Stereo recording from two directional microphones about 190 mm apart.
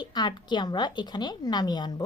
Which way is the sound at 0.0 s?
20° left (ahead or behind).